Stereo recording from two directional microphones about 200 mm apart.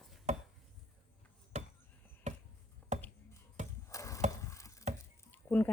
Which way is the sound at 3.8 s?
15° left (ahead or behind).